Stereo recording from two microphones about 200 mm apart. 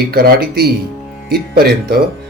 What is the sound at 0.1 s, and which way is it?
Speech, 50° right (ahead or behind).